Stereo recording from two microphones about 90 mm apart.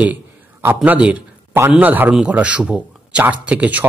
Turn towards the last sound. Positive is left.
turn(degrees=-15)  # may be behind; listen again after turning